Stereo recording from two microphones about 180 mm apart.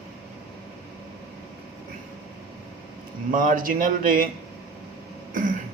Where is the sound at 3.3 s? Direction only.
50° right (ahead or behind).